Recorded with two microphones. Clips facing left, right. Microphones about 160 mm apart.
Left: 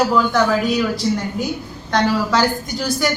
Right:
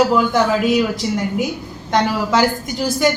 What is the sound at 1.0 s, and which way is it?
Speech, 5° right (ahead or behind).